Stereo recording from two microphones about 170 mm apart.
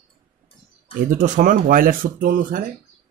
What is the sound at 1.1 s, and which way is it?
Speech, 50° right (ahead or behind).